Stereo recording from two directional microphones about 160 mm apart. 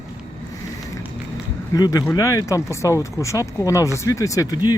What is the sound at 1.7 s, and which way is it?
Speech, 25° left (ahead or behind).